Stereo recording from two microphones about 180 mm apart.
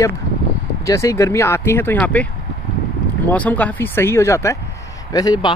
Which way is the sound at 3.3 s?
10° left (ahead or behind).